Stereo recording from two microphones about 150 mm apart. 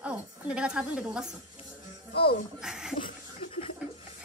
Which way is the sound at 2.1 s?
90° left.